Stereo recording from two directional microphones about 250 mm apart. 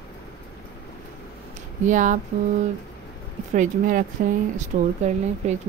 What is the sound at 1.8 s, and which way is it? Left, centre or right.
Speech, right.